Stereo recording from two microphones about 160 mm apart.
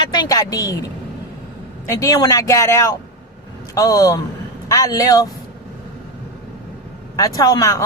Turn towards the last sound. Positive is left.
turn(degrees=20)  # may be behind; listen again after turning